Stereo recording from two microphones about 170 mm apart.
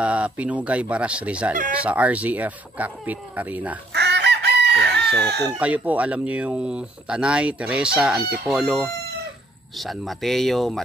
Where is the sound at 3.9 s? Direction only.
90° right.